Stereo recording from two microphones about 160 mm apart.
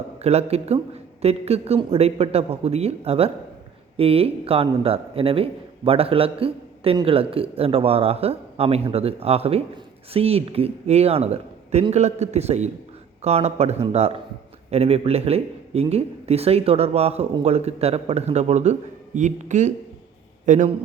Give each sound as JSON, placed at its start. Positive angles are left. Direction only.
{"t": 0.2, "sound": "a man's voice", "side_deg": -40}